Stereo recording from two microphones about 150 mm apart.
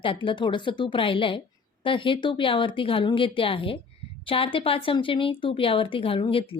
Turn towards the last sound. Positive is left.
turn(degrees=35)  # may be behind; listen again after turning